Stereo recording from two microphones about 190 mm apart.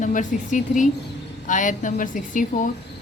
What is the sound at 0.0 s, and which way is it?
Speech, 40° left (ahead or behind).